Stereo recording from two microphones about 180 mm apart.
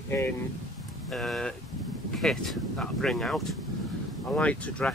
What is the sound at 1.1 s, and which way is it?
Speech, centre (ahead or behind).